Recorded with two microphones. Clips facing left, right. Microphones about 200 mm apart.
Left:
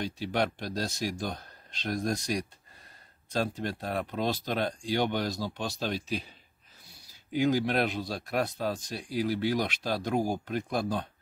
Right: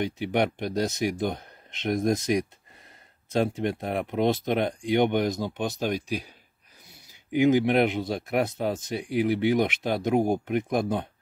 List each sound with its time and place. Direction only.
0.0 s speech: 20° right (ahead or behind)
7.3 s speech: 20° right (ahead or behind)